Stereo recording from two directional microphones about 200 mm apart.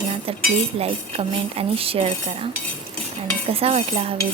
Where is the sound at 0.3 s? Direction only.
30° right (ahead or behind).